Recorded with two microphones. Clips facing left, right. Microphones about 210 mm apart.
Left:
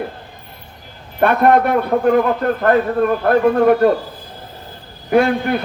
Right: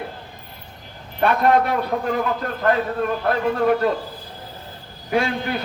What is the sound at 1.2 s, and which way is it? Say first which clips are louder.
A man's voice: left 4 dB; 55° left (ahead or behind).